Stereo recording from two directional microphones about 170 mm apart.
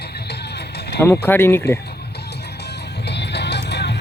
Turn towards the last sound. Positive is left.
turn(degrees=80)